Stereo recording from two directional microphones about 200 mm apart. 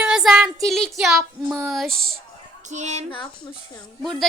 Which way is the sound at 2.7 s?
35° right (ahead or behind).